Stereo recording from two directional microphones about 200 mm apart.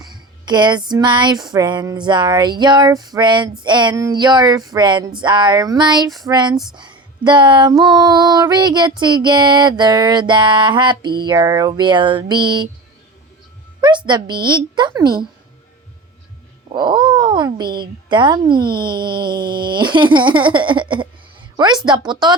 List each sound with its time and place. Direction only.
0.0 s speech: 20° right (ahead or behind)
6.5 s speech: centre (ahead or behind)
7.3 s speech: 20° right (ahead or behind)
13.8 s speech: 25° right (ahead or behind)
16.7 s speech: 20° right (ahead or behind)